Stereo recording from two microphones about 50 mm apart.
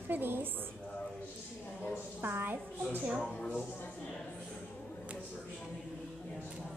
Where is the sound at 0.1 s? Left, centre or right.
Right.